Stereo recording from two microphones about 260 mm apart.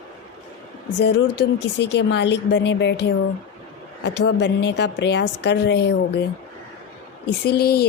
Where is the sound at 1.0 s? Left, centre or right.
Left.